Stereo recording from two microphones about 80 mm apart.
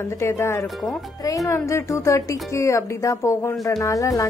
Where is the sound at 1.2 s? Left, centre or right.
Left.